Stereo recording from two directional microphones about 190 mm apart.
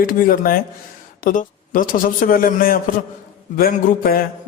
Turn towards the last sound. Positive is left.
turn(degrees=50)  # may be behind; listen again after turning